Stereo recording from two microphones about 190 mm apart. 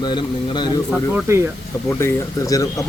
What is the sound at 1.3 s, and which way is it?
Speech, 15° right (ahead or behind).